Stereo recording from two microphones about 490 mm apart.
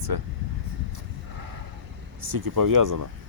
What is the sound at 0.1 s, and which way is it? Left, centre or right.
Speech, right.